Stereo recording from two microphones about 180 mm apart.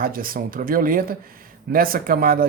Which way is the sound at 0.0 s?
55° right (ahead or behind).